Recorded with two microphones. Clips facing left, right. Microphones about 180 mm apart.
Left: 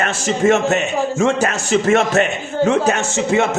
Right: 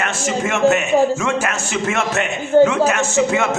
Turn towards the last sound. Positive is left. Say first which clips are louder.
# even
turn(degrees=35)  # may be behind; listen again after turning